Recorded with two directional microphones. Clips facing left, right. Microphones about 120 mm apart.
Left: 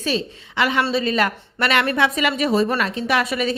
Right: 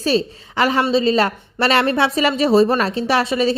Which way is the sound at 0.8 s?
25° right (ahead or behind).